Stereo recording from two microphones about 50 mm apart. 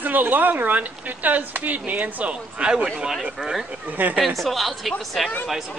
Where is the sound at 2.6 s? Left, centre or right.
Centre.